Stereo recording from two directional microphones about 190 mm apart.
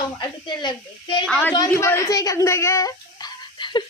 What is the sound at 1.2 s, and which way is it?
Speech, 5° left (ahead or behind).